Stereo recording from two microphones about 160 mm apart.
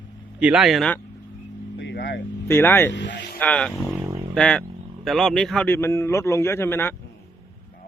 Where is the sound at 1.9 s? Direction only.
90° left.